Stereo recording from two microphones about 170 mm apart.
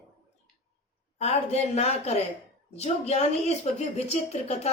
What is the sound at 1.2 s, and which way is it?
A woman's voice, 40° left (ahead or behind).